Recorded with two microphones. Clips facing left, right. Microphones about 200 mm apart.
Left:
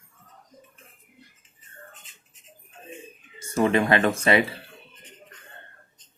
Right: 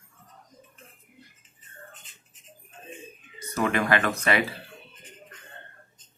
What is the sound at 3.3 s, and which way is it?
Speech, 25° left (ahead or behind).